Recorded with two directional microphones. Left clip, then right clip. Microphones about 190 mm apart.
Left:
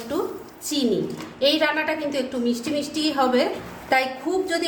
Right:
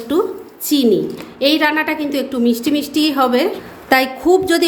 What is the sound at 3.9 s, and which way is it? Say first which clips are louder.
Speech: right 9 dB; 55° right (ahead or behind).